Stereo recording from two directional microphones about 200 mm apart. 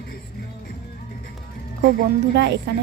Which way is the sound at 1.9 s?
55° right (ahead or behind).